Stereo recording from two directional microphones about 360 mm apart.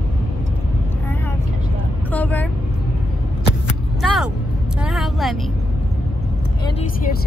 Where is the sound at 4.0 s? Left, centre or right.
Centre.